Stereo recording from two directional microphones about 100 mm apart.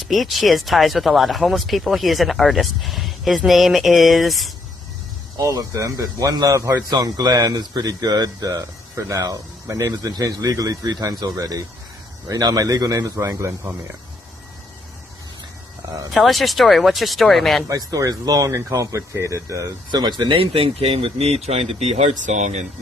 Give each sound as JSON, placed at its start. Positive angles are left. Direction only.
{"t": 0.0, "sound": "speech", "side_deg": 0}
{"t": 5.4, "sound": "speech", "side_deg": -35}
{"t": 6.9, "sound": "speech", "side_deg": -40}
{"t": 16.1, "sound": "speech", "side_deg": 0}
{"t": 17.7, "sound": "speech", "side_deg": -35}
{"t": 19.9, "sound": "speech", "side_deg": -45}
{"t": 20.4, "sound": "speech", "side_deg": -65}